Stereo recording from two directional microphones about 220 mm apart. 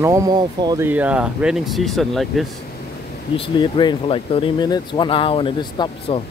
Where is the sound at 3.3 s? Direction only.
20° left (ahead or behind).